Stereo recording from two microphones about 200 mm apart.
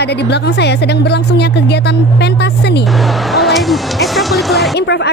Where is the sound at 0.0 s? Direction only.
55° left (ahead or behind).